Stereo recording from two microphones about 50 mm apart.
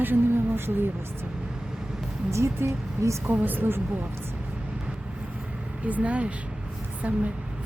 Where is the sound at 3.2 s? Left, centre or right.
Right.